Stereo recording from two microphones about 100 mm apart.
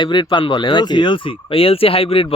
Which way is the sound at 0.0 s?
55° left (ahead or behind).